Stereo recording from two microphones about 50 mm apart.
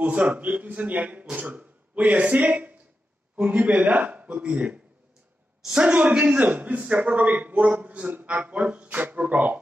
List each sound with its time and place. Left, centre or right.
0.0 s a man's voice: right
5.9 s a man's voice: right